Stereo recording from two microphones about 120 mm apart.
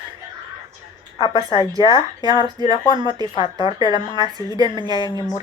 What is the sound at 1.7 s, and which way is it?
A woman's voice, 30° right (ahead or behind).